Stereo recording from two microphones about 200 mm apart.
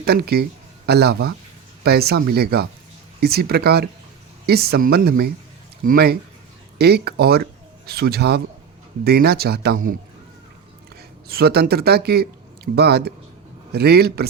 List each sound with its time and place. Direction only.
0.0 s speech: 55° right (ahead or behind)
11.3 s speech: 50° right (ahead or behind)